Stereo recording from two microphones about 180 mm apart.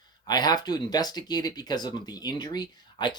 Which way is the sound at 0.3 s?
20° left (ahead or behind).